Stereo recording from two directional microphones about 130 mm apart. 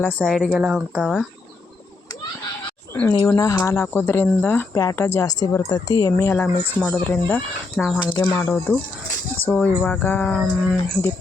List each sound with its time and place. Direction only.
0.0 s speech: 5° left (ahead or behind)
3.2 s a woman's voice: 25° left (ahead or behind)
4.7 s a woman's voice: 25° left (ahead or behind); by 7.9 s 5° left (ahead or behind)
8.1 s speech: 15° left (ahead or behind)